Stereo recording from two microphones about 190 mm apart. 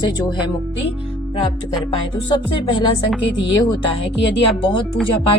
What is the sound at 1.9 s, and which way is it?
Music, 25° left (ahead or behind).